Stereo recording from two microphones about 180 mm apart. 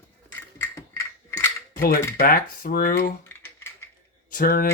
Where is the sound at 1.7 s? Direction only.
50° left (ahead or behind).